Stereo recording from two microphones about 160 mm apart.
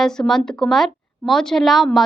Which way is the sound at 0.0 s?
5° left (ahead or behind).